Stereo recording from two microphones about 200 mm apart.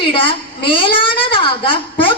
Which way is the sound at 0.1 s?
25° left (ahead or behind).